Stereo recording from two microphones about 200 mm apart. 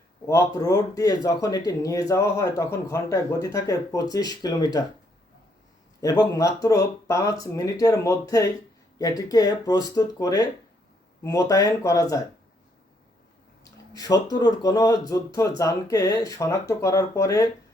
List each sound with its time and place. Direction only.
0.3 s speech: 15° left (ahead or behind)
6.0 s speech: 20° left (ahead or behind)
13.9 s speech: 20° left (ahead or behind)